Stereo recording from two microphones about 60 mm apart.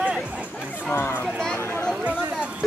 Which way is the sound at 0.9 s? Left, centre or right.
Left.